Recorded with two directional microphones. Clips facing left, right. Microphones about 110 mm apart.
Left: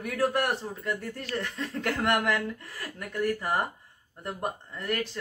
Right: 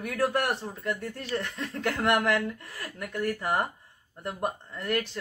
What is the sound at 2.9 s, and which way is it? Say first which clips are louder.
Speech: left 1 dB; centre (ahead or behind).